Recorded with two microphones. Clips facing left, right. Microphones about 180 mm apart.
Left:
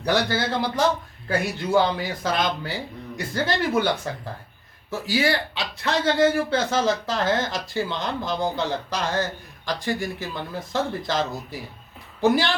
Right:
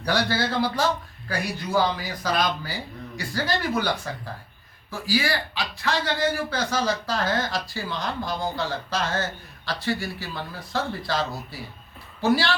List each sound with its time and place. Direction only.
0.0 s a man's voice: 20° left (ahead or behind)